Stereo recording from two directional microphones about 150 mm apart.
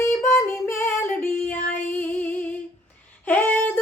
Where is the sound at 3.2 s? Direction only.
10° left (ahead or behind).